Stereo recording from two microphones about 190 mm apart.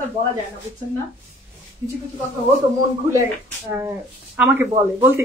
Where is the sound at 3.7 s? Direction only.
10° right (ahead or behind).